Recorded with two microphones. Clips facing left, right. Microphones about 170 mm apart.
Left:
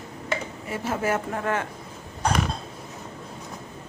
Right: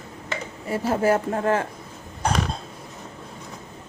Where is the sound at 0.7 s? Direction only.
35° right (ahead or behind).